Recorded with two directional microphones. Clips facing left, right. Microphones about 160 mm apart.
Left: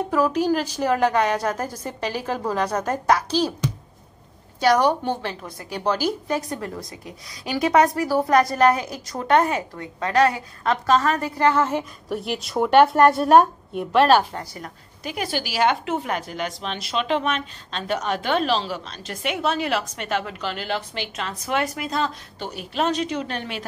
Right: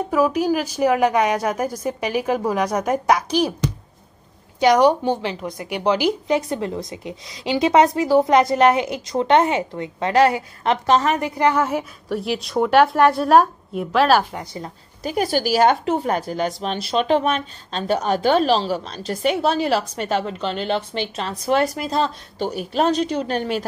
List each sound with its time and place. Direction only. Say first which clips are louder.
0.1 s a woman's voice: right 2 dB; 10° right (ahead or behind)
4.6 s a woman's voice: right 4 dB; 15° right (ahead or behind)
12.1 s speech: right 4 dB; centre (ahead or behind)
14.4 s a woman's voice: right 4 dB; 25° right (ahead or behind)
15.0 s a woman's voice: right 7 dB; 40° right (ahead or behind)